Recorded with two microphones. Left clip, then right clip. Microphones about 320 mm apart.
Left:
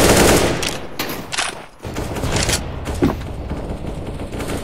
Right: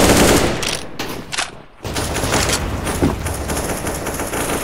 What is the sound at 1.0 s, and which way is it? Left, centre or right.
Mechanisms, centre.